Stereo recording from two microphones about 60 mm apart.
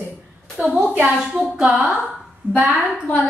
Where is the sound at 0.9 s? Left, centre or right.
Right.